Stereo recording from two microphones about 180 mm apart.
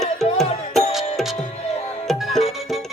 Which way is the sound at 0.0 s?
Centre (ahead or behind).